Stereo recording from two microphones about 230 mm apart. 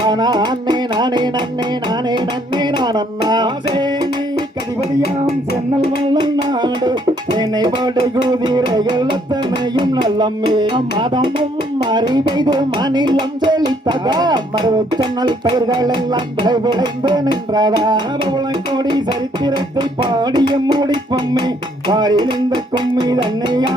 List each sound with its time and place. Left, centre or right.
0.0 s music: centre
6.1 s music: centre
19.5 s music: centre